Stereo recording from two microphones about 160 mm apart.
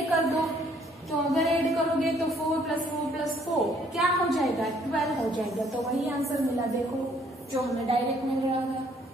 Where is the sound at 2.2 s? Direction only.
Centre (ahead or behind).